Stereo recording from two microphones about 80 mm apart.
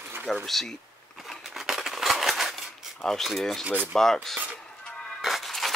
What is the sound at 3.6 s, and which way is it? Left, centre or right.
Speech, right.